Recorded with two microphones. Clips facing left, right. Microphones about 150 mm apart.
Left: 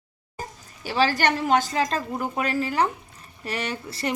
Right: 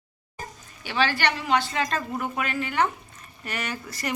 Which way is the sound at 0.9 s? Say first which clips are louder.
Left 3 dB; 35° left (ahead or behind).